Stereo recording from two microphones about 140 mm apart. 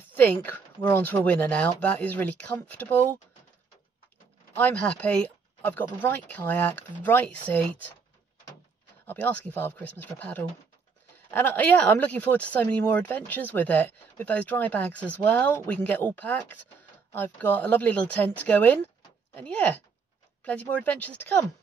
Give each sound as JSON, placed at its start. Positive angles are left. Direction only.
{"t": 0.1, "sound": "speech", "side_deg": 15}
{"t": 4.6, "sound": "speech", "side_deg": 10}
{"t": 9.0, "sound": "speech", "side_deg": 15}